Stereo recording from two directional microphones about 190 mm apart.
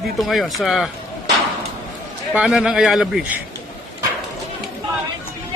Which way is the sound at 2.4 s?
5° right (ahead or behind).